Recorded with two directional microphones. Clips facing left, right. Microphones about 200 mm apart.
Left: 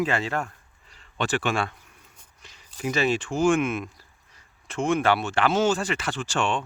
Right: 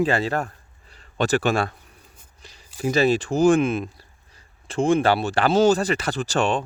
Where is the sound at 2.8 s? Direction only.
35° right (ahead or behind).